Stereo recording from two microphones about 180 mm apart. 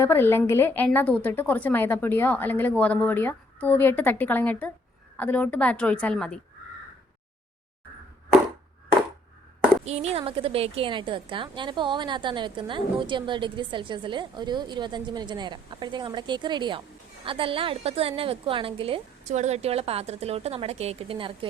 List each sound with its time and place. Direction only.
0.0 s a woman's voice: 10° left (ahead or behind)
9.8 s a woman's voice: 35° right (ahead or behind)